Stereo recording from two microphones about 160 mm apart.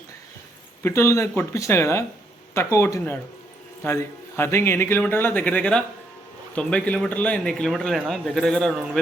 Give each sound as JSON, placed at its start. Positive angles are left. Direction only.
{"t": 0.8, "sound": "a man's voice", "side_deg": 15}